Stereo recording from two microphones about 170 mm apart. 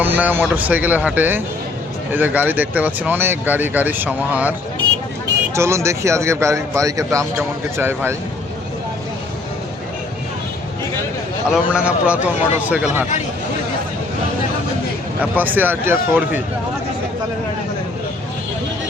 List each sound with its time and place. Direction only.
0.0 s speech: 10° right (ahead or behind)
5.5 s speech: 15° right (ahead or behind)
11.5 s speech: 5° right (ahead or behind)
15.2 s speech: 10° right (ahead or behind)